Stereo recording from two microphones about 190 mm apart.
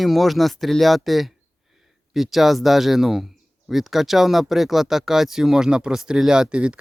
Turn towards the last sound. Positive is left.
turn(degrees=-5)  # may be behind; listen again after turning